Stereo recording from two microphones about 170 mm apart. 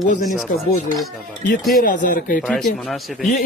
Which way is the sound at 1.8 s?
55° left (ahead or behind).